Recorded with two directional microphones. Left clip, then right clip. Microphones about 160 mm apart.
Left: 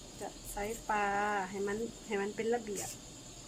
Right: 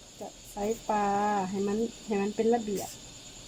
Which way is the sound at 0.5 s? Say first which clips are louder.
Right 6 dB; 20° right (ahead or behind).